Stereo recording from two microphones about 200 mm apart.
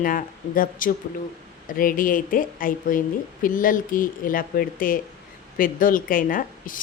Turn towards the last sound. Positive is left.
turn(degrees=45)  # may be behind; listen again after turning